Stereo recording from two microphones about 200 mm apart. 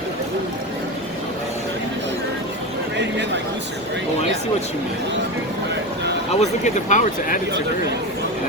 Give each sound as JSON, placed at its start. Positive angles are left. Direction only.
{"t": 6.4, "sound": "speech", "side_deg": 35}